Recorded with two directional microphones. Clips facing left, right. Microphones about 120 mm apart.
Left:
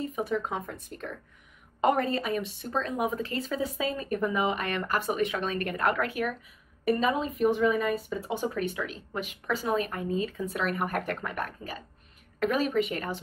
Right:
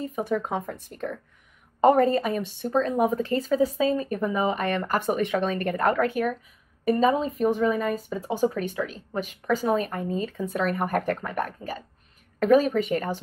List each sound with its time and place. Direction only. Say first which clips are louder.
0.2 s a woman's voice: right 4 dB; 40° right (ahead or behind)
0.9 s speech: right 7 dB; 25° right (ahead or behind)
1.8 s a woman's voice: right 7 dB; 40° right (ahead or behind)